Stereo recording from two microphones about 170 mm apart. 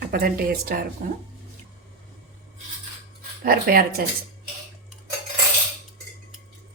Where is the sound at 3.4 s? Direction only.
60° right (ahead or behind).